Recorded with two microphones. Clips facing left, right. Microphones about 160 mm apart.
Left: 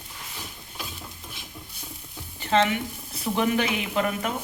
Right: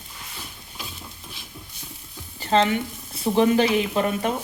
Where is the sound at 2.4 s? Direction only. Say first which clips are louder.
Right 2 dB; 35° right (ahead or behind).